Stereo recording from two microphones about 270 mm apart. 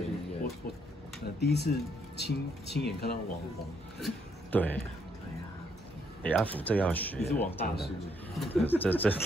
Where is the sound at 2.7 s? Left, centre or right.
Left.